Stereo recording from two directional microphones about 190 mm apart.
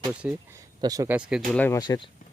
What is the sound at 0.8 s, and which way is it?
Speech, 20° right (ahead or behind).